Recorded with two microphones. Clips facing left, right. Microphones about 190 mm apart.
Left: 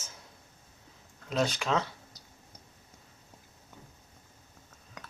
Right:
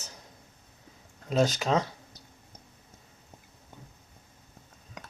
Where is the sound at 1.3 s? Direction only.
40° right (ahead or behind).